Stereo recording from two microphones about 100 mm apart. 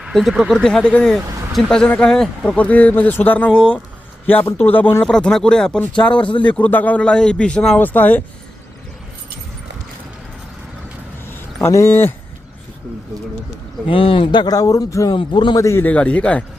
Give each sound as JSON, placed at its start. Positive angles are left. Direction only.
{"t": 0.0, "sound": "speech", "side_deg": -5}
{"t": 0.5, "sound": "speech", "side_deg": 5}
{"t": 5.0, "sound": "speech", "side_deg": 10}
{"t": 11.6, "sound": "speech", "side_deg": 25}
{"t": 13.8, "sound": "speech", "side_deg": 65}
{"t": 15.1, "sound": "a man's voice", "side_deg": 55}
{"t": 15.5, "sound": "speech", "side_deg": 25}